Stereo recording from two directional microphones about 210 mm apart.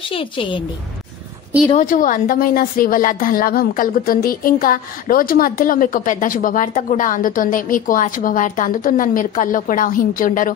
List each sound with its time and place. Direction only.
0.1 s a woman's voice: 25° left (ahead or behind)
1.8 s a woman's voice: 40° left (ahead or behind)